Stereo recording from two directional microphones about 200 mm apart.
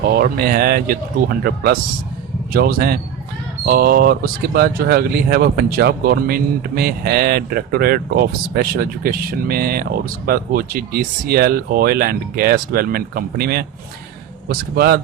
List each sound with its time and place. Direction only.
0.1 s speech: 50° right (ahead or behind)